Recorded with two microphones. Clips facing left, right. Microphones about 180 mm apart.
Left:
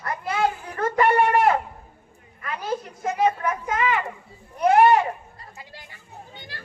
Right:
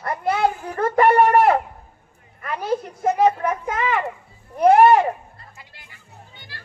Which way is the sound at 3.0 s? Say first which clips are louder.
Right 4 dB; 50° right (ahead or behind).